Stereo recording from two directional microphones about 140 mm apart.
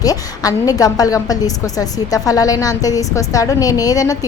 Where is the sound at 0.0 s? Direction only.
25° left (ahead or behind).